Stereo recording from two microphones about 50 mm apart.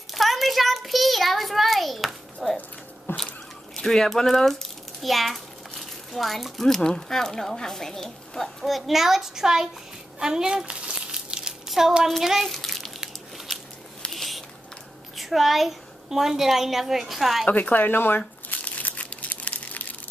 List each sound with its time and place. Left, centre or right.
0.1 s a sound: centre
3.1 s a sound: left
3.7 s a child's voice: centre
10.1 s crumpling: centre
11.8 s child singing: centre
12.2 s bathtub: centre
14.1 s biting: centre
15.1 s a child's voice: centre
17.5 s speech: left
18.5 s crumpling: left